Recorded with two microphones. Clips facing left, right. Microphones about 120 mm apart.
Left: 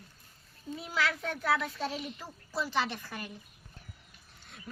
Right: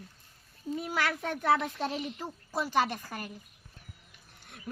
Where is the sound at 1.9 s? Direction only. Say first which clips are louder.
Right 4 dB; 20° right (ahead or behind).